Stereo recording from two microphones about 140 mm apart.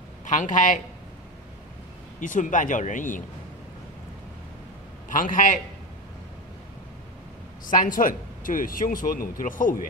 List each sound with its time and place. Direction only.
0.2 s speech: 65° left (ahead or behind)
2.1 s speech: 65° left (ahead or behind)
5.1 s speech: 75° left (ahead or behind)
7.8 s speech: 75° left (ahead or behind)